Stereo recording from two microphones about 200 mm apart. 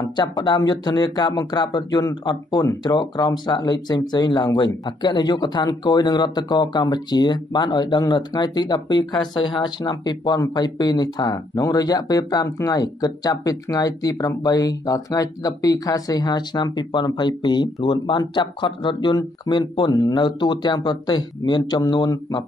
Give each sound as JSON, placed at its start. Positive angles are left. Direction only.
{"t": 0.1, "sound": "speech", "side_deg": 20}